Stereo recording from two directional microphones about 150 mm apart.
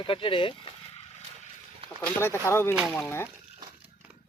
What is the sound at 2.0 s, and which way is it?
Speech, 15° left (ahead or behind).